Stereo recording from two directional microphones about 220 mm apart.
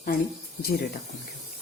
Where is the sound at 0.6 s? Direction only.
45° left (ahead or behind).